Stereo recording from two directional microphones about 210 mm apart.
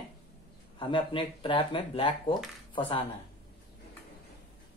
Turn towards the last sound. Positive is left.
turn(degrees=25)  # may be behind; listen again after turning